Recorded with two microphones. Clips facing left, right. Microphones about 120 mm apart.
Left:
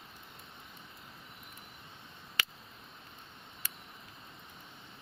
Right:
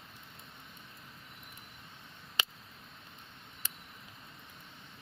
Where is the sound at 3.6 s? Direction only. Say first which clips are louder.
Even; 20° right (ahead or behind).